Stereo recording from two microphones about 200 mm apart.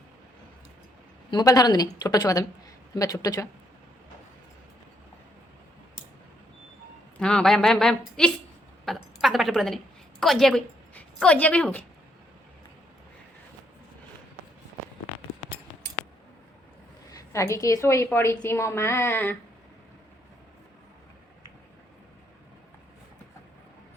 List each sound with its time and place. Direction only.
1.3 s a woman's voice: 20° left (ahead or behind)
7.2 s a woman's voice: 5° left (ahead or behind)
17.1 s a woman's voice: 15° left (ahead or behind)